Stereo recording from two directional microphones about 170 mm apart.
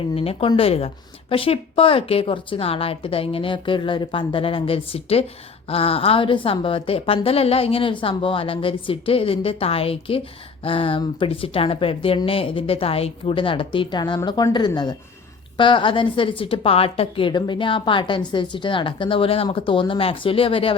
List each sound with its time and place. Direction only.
0.2 s a woman's voice: 35° left (ahead or behind)